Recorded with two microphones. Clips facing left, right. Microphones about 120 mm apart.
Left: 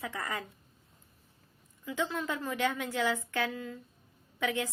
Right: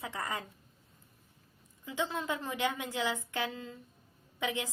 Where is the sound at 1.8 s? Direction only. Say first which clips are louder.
Left 1 dB; 20° right (ahead or behind).